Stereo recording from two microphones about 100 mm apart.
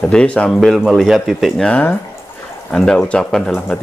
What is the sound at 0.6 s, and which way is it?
Speech, centre (ahead or behind).